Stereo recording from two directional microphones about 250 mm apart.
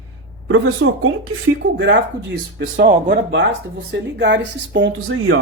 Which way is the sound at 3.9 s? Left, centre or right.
Right.